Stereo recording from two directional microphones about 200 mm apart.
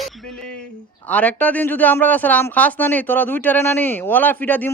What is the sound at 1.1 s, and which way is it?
Speech, 5° left (ahead or behind).